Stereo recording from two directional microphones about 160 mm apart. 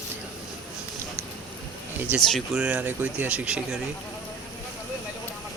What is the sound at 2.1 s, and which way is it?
Speech, centre (ahead or behind).